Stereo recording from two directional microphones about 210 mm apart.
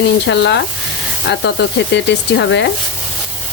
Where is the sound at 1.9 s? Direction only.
55° left (ahead or behind).